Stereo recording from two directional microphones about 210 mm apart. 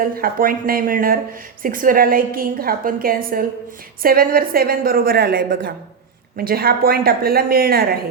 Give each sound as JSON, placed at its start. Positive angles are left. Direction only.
{"t": 0.0, "sound": "speech", "side_deg": -45}